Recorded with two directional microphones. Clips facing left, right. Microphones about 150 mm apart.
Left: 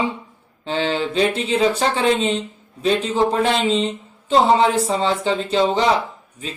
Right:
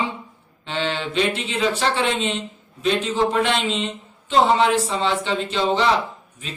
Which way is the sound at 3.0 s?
35° left (ahead or behind).